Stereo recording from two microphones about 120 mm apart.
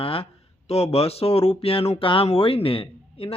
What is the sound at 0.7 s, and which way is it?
Speech, 55° left (ahead or behind).